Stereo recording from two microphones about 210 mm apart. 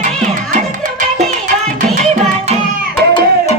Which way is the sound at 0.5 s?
35° right (ahead or behind).